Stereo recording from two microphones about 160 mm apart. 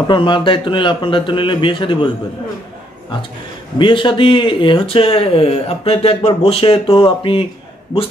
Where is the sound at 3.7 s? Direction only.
30° left (ahead or behind).